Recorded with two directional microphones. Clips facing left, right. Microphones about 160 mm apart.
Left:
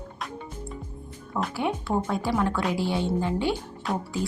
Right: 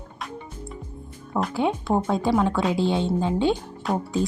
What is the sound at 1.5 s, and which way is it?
Speech, 20° right (ahead or behind).